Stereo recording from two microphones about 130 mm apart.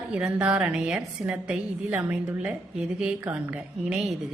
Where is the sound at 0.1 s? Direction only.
5° right (ahead or behind).